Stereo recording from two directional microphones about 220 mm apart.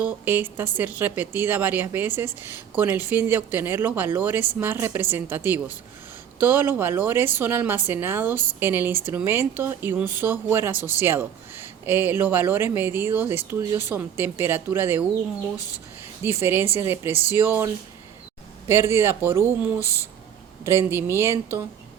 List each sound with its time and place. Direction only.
0.0 s a woman's voice: 5° right (ahead or behind)
15.5 s speech: 15° left (ahead or behind)
16.4 s a woman's voice: 10° right (ahead or behind)
18.7 s a woman's voice: 10° right (ahead or behind)
19.8 s speech: 15° left (ahead or behind)
20.7 s a woman's voice: 10° right (ahead or behind)